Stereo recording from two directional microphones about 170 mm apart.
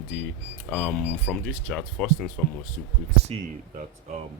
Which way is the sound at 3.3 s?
35° right (ahead or behind).